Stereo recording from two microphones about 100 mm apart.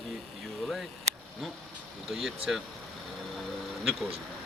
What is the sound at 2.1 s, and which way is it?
Speech, 5° right (ahead or behind).